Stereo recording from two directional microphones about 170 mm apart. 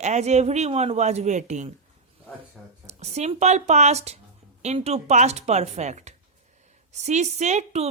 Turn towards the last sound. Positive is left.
turn(degrees=-40)  # may be behind; listen again after turning